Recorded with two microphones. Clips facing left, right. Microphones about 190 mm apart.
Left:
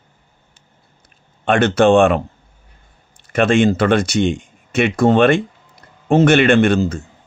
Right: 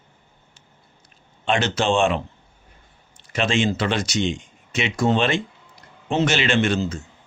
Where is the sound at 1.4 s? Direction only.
55° left (ahead or behind).